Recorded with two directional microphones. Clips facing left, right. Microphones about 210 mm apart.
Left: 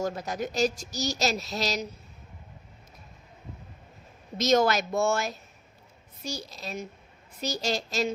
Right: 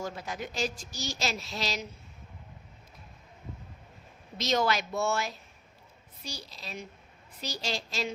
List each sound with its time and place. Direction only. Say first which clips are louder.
0.0 s speech: left 6 dB; 40° left (ahead or behind)
4.4 s a woman's voice: left 5 dB; 45° left (ahead or behind)